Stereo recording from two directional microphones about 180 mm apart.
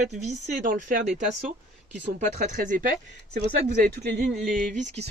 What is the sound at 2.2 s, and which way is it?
A man's voice, 40° right (ahead or behind).